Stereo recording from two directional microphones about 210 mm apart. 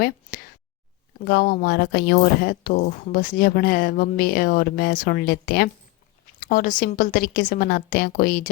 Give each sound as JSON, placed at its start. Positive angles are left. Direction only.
{"t": 1.2, "sound": "speech", "side_deg": 50}